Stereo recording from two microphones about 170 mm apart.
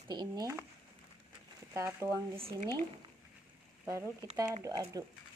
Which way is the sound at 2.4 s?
35° right (ahead or behind).